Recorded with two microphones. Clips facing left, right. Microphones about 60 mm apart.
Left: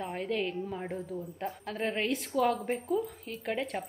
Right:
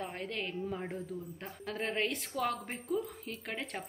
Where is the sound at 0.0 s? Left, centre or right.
Centre.